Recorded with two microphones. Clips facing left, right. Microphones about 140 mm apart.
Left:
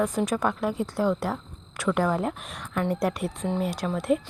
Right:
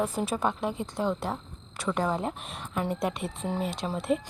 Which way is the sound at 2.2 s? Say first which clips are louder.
Left 3 dB; 5° right (ahead or behind).